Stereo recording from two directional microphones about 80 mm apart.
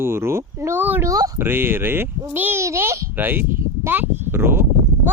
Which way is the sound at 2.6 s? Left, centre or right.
Right.